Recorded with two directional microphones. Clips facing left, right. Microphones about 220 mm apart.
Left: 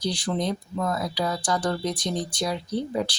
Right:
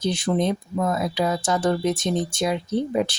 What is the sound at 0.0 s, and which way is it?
Speech, 25° right (ahead or behind).